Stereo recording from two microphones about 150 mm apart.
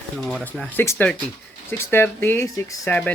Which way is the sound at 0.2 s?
Centre (ahead or behind).